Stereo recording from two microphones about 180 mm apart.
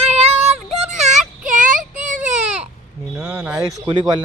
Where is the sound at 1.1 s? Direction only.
45° right (ahead or behind).